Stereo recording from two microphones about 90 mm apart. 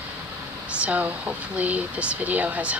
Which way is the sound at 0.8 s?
15° right (ahead or behind).